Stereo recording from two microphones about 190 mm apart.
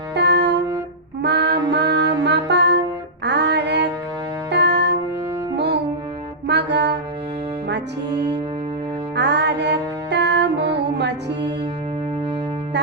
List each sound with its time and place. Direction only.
0.1 s music: 65° right (ahead or behind)